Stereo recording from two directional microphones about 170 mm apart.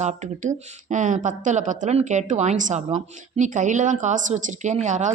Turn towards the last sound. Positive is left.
turn(degrees=-45)  # may be behind; listen again after turning